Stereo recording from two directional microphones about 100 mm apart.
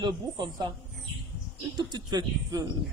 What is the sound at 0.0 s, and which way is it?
Speech, 50° right (ahead or behind).